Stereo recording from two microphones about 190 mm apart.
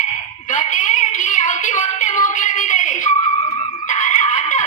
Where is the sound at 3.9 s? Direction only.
40° left (ahead or behind).